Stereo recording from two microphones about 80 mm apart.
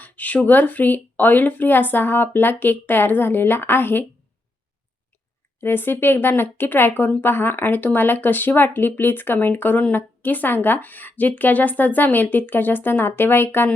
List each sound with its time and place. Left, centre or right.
0.0 s speech: centre
5.5 s speech: left